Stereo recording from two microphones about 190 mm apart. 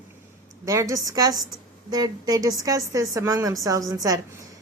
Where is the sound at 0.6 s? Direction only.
15° right (ahead or behind).